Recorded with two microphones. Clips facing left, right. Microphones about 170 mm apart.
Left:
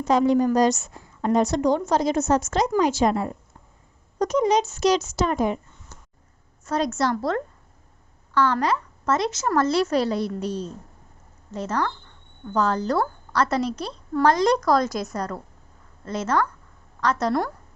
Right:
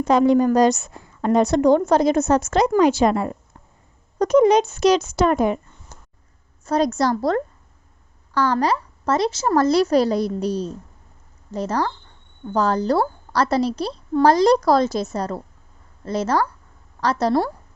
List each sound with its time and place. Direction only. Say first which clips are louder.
0.0 s a woman's voice: right 3 dB; 60° right (ahead or behind)
4.2 s a woman's voice: right 6 dB; 55° right (ahead or behind)
6.7 s a woman's voice: right 4 dB; 35° right (ahead or behind)